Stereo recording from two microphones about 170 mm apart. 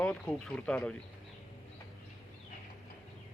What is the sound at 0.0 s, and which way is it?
Speech, 5° left (ahead or behind).